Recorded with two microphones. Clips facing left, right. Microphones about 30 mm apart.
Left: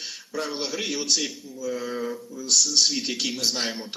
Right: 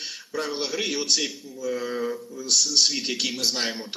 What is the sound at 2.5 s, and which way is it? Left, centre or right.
Speech, right.